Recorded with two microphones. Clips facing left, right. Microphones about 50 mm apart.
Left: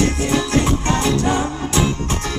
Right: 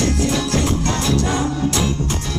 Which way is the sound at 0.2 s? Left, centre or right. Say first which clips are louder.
Left 1 dB; left.